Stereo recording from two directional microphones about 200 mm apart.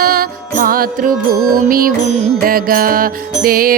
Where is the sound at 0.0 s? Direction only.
45° right (ahead or behind).